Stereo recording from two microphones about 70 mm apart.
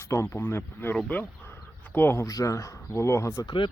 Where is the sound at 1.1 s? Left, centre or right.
Left.